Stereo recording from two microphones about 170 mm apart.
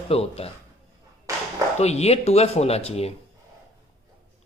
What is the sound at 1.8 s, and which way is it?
A man's voice, 40° left (ahead or behind).